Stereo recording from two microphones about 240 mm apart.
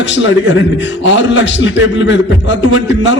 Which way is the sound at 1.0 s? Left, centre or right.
Left.